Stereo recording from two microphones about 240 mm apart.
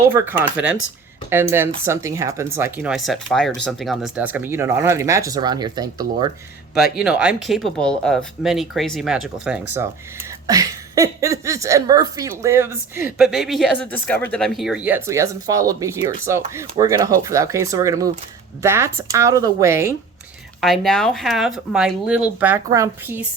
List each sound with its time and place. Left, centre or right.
0.1 s speech: centre
6.7 s speech: left
7.0 s speech: centre
20.6 s speech: centre